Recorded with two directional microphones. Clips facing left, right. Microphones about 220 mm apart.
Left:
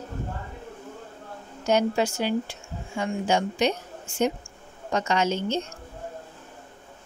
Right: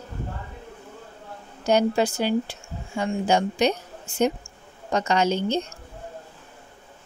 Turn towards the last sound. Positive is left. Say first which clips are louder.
# right 3 dB
turn(degrees=-35)  # may be behind; listen again after turning